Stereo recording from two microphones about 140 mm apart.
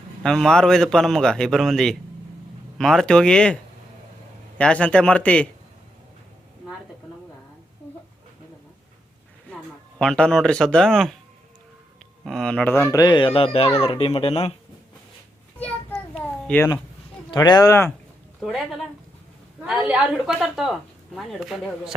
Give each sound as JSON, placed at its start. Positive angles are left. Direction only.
{"t": 0.2, "sound": "a man's voice", "side_deg": 5}
{"t": 10.0, "sound": "a man's voice", "side_deg": 5}
{"t": 12.2, "sound": "speech", "side_deg": 5}
{"t": 15.5, "sound": "a sound", "side_deg": 15}
{"t": 17.3, "sound": "speech", "side_deg": 30}
{"t": 18.4, "sound": "a man's voice", "side_deg": 0}